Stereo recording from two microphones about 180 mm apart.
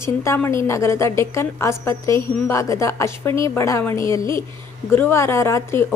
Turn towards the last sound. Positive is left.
turn(degrees=15)  # may be behind; listen again after turning